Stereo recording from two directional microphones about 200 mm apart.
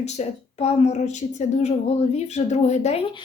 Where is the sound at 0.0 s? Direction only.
30° left (ahead or behind).